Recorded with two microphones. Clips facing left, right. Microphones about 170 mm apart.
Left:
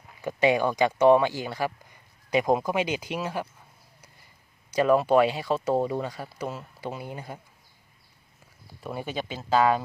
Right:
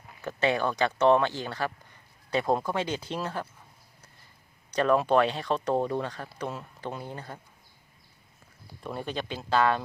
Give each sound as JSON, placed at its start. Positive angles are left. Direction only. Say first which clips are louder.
{"t": 0.2, "sound": "speech", "louder": "left 4 dB", "side_deg": 10}
{"t": 4.7, "sound": "speech", "louder": "left 3 dB", "side_deg": 10}
{"t": 8.8, "sound": "speech", "louder": "left 1 dB", "side_deg": 5}